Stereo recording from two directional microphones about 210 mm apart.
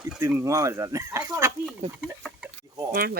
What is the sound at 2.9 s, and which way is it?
Speech, 45° right (ahead or behind).